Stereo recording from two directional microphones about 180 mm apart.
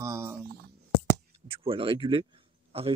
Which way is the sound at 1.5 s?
30° right (ahead or behind).